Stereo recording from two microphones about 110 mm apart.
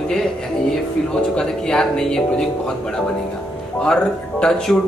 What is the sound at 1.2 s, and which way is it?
Speech, 5° left (ahead or behind).